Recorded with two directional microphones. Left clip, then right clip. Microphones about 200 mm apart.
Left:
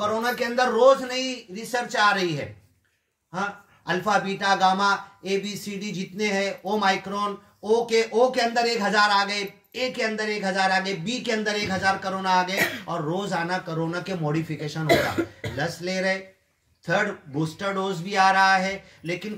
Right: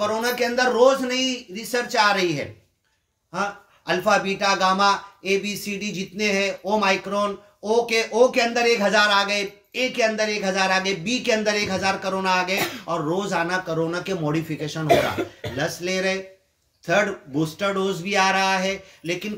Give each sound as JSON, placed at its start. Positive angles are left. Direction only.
{"t": 0.0, "sound": "a man's voice", "side_deg": -25}